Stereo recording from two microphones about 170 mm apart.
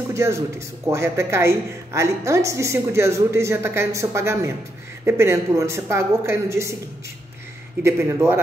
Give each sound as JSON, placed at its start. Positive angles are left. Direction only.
{"t": 0.1, "sound": "a man's voice", "side_deg": -15}
{"t": 7.8, "sound": "a woman's voice", "side_deg": -15}